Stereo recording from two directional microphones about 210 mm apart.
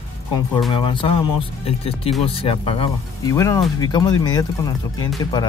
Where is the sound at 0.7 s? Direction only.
25° left (ahead or behind).